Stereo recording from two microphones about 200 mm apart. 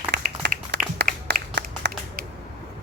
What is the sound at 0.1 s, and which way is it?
Applause, 60° right (ahead or behind).